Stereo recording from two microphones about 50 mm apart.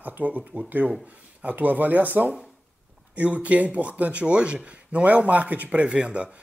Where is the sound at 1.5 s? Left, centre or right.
Right.